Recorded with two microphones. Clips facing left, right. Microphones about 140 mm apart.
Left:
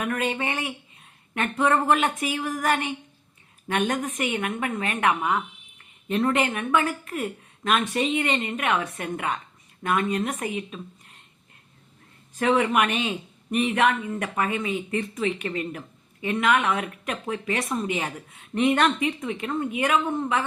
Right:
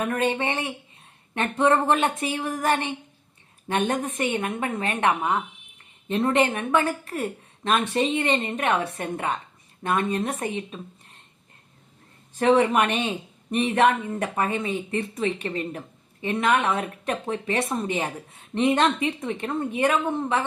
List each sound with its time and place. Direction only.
0.0 s a woman's voice: 35° right (ahead or behind)
12.3 s a woman's voice: 35° right (ahead or behind)